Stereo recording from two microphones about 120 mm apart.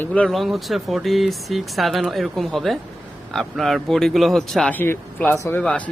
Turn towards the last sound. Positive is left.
turn(degrees=10)  # may be behind; listen again after turning